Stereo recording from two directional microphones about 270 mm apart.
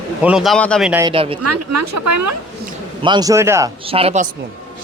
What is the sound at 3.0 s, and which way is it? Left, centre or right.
Speech, centre.